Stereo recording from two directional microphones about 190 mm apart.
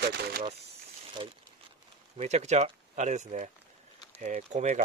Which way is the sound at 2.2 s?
35° right (ahead or behind).